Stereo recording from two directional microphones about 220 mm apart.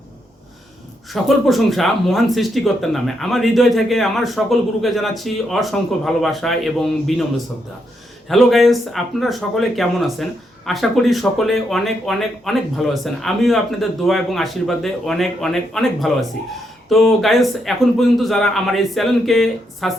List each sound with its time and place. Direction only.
1.1 s speech: centre (ahead or behind)
8.3 s speech: centre (ahead or behind)